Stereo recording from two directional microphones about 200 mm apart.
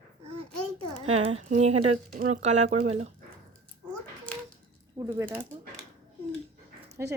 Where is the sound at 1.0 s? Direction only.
30° right (ahead or behind).